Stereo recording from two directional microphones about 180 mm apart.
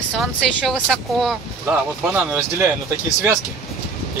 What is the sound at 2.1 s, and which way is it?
Speech, 10° right (ahead or behind).